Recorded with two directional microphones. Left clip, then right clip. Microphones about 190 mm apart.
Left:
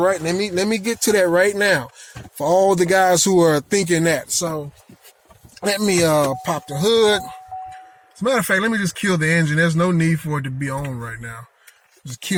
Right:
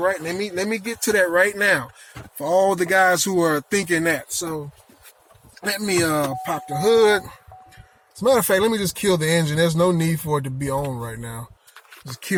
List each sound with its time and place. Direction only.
0.0 s speech: 40° left (ahead or behind)
6.7 s speech: 30° left (ahead or behind)
8.3 s speech: 5° right (ahead or behind)